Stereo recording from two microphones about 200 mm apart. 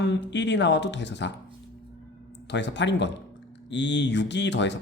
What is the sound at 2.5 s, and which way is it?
A man's voice, 60° left (ahead or behind).